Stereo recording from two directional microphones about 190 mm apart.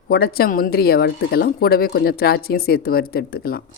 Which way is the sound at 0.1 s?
55° left (ahead or behind).